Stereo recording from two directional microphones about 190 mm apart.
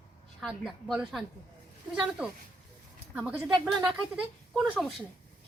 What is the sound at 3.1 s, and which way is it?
A woman's voice, 5° right (ahead or behind).